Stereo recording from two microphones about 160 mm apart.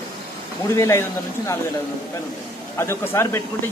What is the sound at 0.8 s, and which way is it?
Speech, 20° left (ahead or behind).